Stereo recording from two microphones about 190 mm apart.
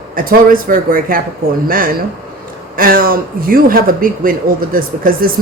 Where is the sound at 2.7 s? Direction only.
50° right (ahead or behind).